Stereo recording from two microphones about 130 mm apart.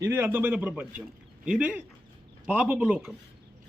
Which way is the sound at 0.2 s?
15° right (ahead or behind).